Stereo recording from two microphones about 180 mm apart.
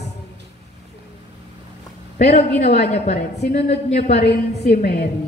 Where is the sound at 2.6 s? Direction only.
65° left (ahead or behind).